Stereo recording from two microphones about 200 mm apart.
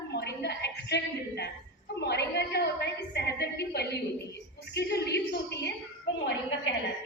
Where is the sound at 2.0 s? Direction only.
55° left (ahead or behind).